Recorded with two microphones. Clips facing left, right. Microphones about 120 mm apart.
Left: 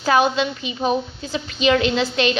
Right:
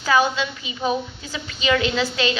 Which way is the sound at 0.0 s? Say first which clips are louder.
Left 2 dB; 50° left (ahead or behind).